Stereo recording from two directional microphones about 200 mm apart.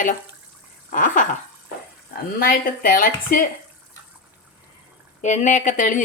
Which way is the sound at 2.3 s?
45° left (ahead or behind).